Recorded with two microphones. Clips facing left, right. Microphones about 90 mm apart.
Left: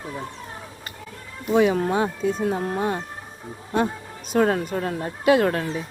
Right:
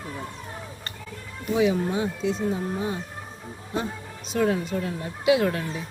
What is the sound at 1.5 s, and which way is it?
Speech, 60° left (ahead or behind).